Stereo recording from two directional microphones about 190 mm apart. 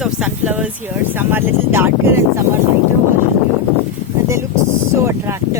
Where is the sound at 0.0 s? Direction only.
5° right (ahead or behind).